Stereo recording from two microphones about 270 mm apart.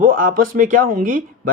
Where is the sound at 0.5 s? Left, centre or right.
Right.